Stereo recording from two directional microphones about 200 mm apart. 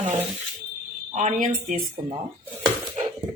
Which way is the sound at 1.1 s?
35° right (ahead or behind).